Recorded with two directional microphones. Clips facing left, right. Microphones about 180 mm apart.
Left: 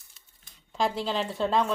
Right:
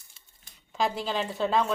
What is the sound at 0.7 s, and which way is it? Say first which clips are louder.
Speech: left 1 dB; centre (ahead or behind).